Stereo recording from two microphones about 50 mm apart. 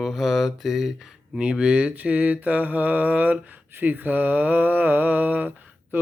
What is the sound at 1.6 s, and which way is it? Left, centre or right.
Mantra, right.